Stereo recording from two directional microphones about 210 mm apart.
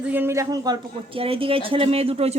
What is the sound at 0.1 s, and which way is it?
Speech, 10° right (ahead or behind).